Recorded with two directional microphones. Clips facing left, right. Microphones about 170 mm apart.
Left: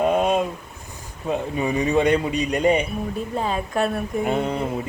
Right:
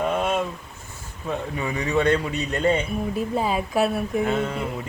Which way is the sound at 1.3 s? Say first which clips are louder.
Left 4 dB; 20° left (ahead or behind).